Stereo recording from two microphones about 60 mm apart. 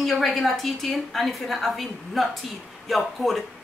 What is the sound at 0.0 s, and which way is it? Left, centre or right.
A woman's voice, centre.